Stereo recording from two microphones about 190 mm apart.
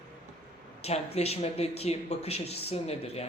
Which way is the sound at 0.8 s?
35° left (ahead or behind).